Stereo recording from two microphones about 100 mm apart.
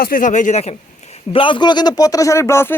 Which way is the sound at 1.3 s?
60° left (ahead or behind).